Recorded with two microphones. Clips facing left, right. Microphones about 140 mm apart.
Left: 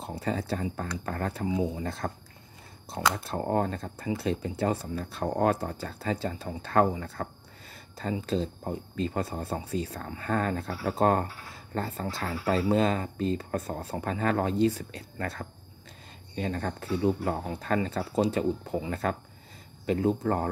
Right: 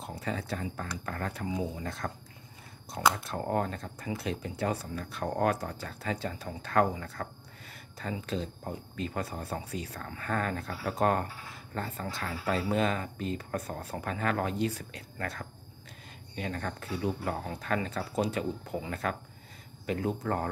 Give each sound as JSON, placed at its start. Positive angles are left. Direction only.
{"t": 0.0, "sound": "speech", "side_deg": 35}